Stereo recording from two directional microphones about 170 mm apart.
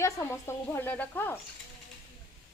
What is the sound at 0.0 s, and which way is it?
Speech, 15° left (ahead or behind).